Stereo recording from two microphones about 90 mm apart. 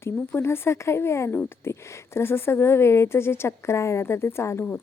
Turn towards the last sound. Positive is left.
turn(degrees=25)  # may be behind; listen again after turning